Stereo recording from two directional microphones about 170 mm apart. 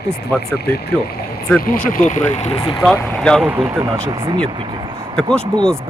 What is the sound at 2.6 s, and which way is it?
Speech, 25° left (ahead or behind).